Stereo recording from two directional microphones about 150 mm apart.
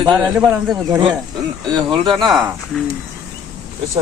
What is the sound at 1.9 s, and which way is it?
Speech, 35° right (ahead or behind).